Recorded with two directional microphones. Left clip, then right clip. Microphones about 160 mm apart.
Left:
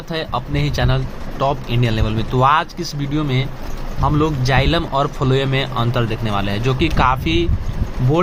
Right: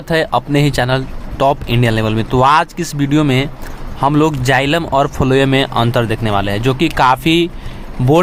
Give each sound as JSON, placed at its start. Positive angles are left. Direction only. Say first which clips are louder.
{"t": 0.1, "sound": "speech", "louder": "right 9 dB", "side_deg": -40}
{"t": 4.0, "sound": "speech", "louder": "right 6 dB", "side_deg": -50}
{"t": 4.5, "sound": "speech", "louder": "right 4 dB", "side_deg": -35}